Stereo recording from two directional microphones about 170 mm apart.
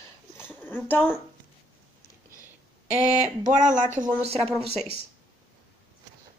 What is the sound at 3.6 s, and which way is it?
Speech, 45° right (ahead or behind).